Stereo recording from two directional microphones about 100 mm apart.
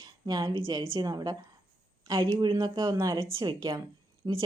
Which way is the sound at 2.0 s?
55° right (ahead or behind).